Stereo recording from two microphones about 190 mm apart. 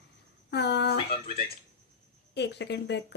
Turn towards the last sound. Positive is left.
turn(degrees=65)  # may be behind; listen again after turning